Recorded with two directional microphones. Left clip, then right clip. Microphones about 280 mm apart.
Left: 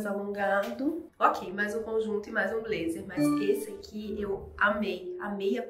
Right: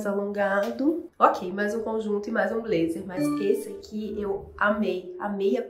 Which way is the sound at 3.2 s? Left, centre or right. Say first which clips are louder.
Right 2 dB; centre.